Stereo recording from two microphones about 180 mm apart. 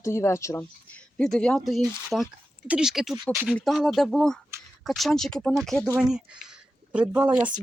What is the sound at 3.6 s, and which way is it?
Speech, centre (ahead or behind).